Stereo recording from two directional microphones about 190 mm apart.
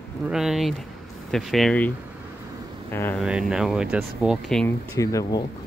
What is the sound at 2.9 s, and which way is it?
Speech, 10° left (ahead or behind).